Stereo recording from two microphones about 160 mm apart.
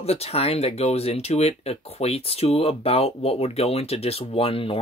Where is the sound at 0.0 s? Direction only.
40° left (ahead or behind).